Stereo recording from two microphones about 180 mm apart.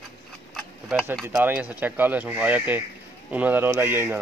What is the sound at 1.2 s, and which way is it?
Speech, 10° right (ahead or behind).